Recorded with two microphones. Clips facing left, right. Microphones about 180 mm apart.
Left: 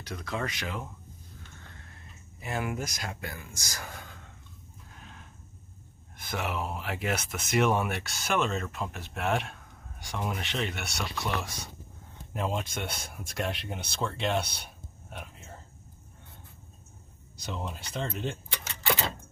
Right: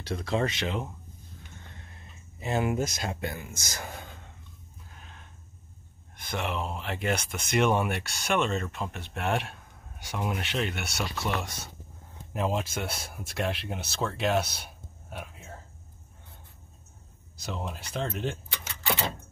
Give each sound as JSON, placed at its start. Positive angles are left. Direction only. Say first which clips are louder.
{"t": 0.0, "sound": "speech", "louder": "right 6 dB", "side_deg": -30}
{"t": 1.6, "sound": "a sound", "louder": "right 1 dB", "side_deg": -20}
{"t": 2.4, "sound": "speech", "louder": "right 5 dB", "side_deg": -25}
{"t": 6.1, "sound": "speech", "louder": "right 1 dB", "side_deg": 5}
{"t": 17.4, "sound": "speech", "louder": "right 1 dB", "side_deg": 0}